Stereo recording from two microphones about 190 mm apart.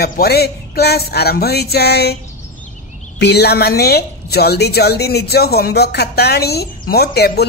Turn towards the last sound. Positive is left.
turn(degrees=55)  # may be behind; listen again after turning